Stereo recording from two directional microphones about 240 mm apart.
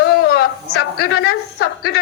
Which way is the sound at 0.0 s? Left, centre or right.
Left.